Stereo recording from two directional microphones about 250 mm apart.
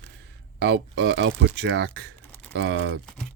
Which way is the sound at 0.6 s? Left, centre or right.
Right.